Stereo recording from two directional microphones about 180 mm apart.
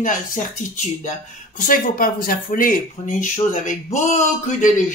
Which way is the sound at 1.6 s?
50° left (ahead or behind).